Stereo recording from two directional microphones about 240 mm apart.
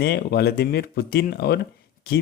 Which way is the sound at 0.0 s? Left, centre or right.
Left.